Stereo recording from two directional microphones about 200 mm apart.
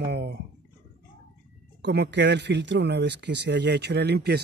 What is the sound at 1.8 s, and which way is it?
Speech, 55° right (ahead or behind).